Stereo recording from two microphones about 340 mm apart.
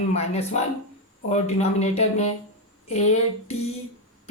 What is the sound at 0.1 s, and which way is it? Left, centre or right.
A woman's voice, centre.